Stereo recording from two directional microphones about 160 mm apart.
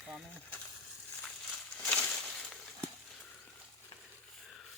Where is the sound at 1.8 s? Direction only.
5° left (ahead or behind).